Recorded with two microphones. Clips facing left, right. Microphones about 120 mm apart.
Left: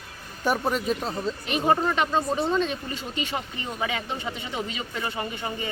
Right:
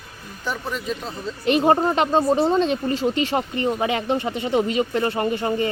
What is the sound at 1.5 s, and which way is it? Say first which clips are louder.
Speech: right 6 dB; 40° right (ahead or behind).